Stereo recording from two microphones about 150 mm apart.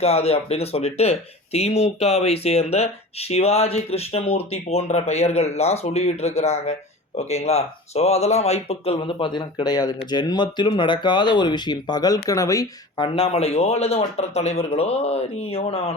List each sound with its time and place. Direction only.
0.0 s speech: 45° left (ahead or behind); by 13.1 s 25° left (ahead or behind)
13.1 s speech: 40° left (ahead or behind)